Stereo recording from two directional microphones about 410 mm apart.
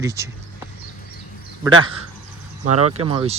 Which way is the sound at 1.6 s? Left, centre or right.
Centre.